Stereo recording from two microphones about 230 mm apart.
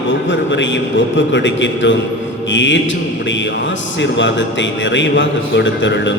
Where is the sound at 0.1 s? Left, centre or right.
Left.